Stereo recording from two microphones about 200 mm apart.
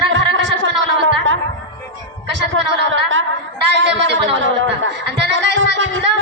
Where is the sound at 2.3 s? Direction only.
60° right (ahead or behind).